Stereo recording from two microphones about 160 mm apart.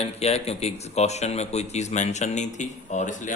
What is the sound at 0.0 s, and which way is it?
Speech, 40° left (ahead or behind).